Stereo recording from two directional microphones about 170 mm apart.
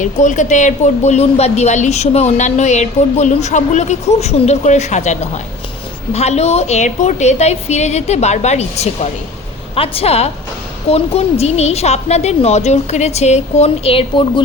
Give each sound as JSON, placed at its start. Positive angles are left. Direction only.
{"t": 0.0, "sound": "speech", "side_deg": 45}